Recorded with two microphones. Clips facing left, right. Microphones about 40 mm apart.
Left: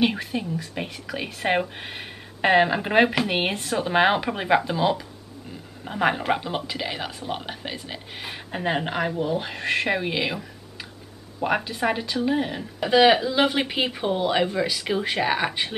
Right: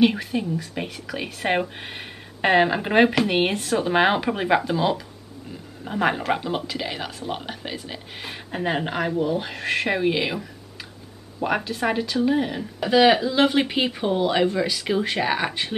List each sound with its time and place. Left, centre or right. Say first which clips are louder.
0.0 s speech: right 4 dB; centre